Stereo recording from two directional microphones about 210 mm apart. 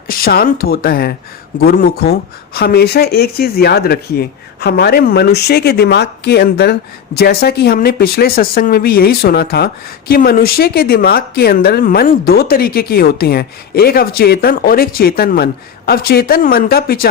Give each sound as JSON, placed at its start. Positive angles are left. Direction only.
{"t": 0.1, "sound": "speech", "side_deg": 45}